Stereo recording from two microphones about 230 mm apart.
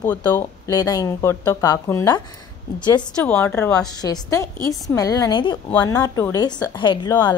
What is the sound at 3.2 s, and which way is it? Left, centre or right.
A woman's voice, centre.